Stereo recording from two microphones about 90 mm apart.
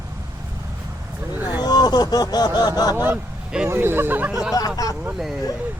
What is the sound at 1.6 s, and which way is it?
Speech, 50° left (ahead or behind).